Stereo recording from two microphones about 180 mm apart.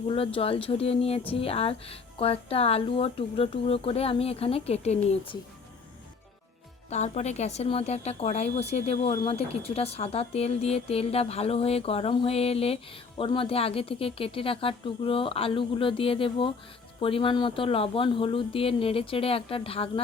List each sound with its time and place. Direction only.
0.1 s speech: 30° left (ahead or behind)
6.9 s speech: 40° left (ahead or behind)